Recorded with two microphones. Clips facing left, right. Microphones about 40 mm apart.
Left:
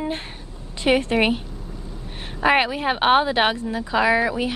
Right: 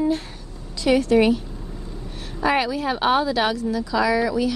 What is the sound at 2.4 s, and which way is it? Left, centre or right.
A woman's voice, left.